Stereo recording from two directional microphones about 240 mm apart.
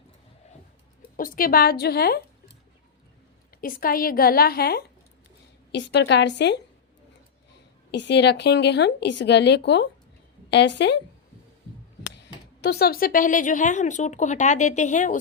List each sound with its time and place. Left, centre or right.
1.1 s speech: left
3.6 s speech: left
7.9 s speech: left
12.6 s speech: left